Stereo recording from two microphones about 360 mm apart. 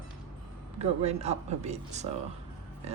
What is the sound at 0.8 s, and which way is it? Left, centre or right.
Speech, centre.